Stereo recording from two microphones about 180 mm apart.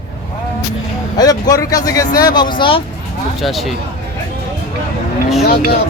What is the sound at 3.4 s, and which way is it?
Speech, centre (ahead or behind).